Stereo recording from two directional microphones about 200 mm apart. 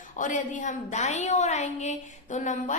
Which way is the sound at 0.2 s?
40° left (ahead or behind).